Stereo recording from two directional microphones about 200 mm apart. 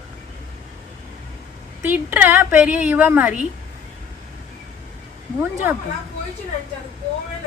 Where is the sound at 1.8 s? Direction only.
10° right (ahead or behind).